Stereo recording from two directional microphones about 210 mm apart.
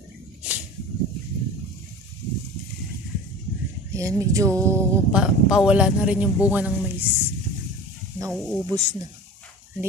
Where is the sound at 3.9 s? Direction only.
15° right (ahead or behind).